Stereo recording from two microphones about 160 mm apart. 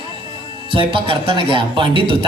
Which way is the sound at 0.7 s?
30° right (ahead or behind).